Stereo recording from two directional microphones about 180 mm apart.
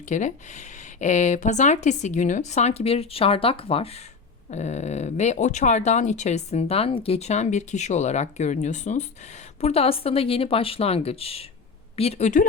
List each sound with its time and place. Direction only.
0.1 s speech: 40° left (ahead or behind)